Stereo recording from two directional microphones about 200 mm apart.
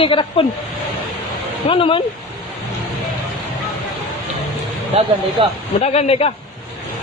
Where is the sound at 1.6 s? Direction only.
25° left (ahead or behind).